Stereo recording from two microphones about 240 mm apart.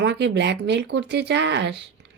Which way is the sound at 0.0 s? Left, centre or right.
Right.